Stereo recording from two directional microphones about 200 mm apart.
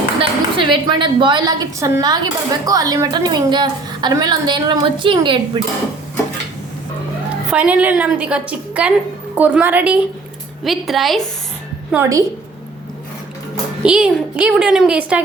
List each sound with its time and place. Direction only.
0.2 s a woman's voice: 25° right (ahead or behind)
7.5 s a woman's voice: 5° right (ahead or behind)
11.9 s a woman's voice: 15° right (ahead or behind)
13.8 s a woman's voice: 5° right (ahead or behind)